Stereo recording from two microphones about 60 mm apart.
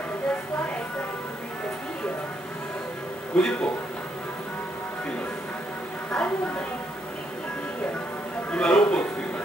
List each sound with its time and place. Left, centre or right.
3.3 s a man's voice: centre
6.1 s a sound: centre
8.5 s a man's voice: centre